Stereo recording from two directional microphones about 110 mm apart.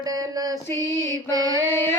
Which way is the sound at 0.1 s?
35° right (ahead or behind).